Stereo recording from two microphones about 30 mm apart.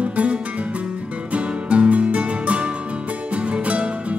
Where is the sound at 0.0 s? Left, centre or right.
Right.